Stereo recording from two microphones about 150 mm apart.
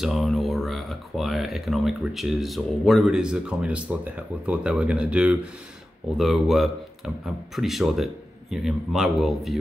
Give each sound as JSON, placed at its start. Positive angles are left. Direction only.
{"t": 0.0, "sound": "speech", "side_deg": 0}